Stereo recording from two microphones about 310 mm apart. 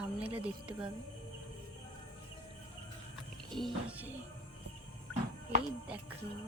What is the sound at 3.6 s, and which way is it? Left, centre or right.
Speech, centre.